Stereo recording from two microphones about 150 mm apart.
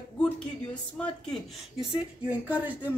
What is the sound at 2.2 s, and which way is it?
Speech, 10° right (ahead or behind).